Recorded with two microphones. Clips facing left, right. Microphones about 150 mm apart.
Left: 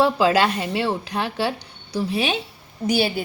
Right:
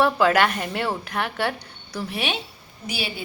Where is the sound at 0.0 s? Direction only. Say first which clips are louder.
Left 1 dB; 25° left (ahead or behind).